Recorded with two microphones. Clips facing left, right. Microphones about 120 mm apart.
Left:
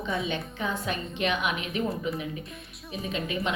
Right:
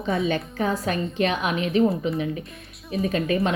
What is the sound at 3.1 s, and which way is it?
Speech, 45° right (ahead or behind).